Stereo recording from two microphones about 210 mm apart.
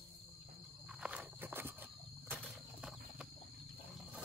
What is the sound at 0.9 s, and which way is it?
Walk, 5° right (ahead or behind).